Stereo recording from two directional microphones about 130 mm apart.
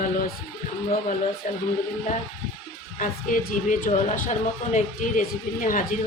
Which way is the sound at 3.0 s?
90° left.